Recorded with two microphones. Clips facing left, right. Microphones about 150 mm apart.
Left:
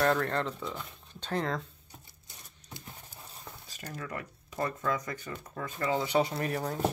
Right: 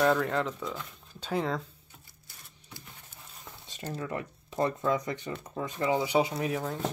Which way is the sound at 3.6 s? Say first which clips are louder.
Right 6 dB; 25° right (ahead or behind).